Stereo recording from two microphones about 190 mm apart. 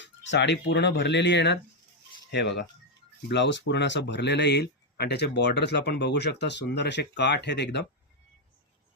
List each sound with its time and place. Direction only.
0.0 s speech: 70° left (ahead or behind)